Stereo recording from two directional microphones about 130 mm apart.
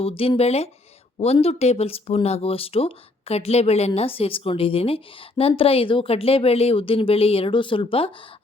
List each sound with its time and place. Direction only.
0.0 s speech: 45° left (ahead or behind)